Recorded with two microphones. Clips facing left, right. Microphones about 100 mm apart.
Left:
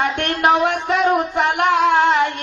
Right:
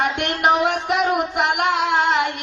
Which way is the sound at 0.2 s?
15° right (ahead or behind).